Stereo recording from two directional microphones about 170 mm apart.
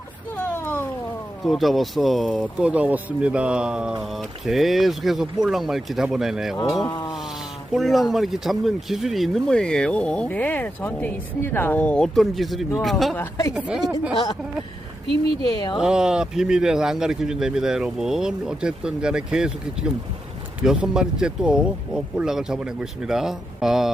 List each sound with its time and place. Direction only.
0.3 s a sound: 10° left (ahead or behind)
1.5 s speech: centre (ahead or behind)
6.8 s a woman's voice: 25° left (ahead or behind)
7.7 s speech: centre (ahead or behind)
13.1 s a woman's voice: 20° left (ahead or behind)
13.5 s speech: 5° right (ahead or behind)
15.4 s a woman's voice: 25° left (ahead or behind)
15.8 s speech: 5° right (ahead or behind)